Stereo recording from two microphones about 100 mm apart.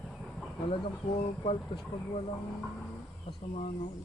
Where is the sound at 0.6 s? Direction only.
70° left (ahead or behind).